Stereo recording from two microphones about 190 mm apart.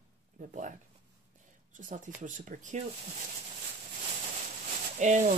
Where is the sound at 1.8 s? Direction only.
45° right (ahead or behind).